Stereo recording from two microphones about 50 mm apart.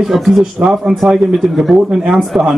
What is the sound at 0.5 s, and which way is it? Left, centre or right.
A man's voice, centre.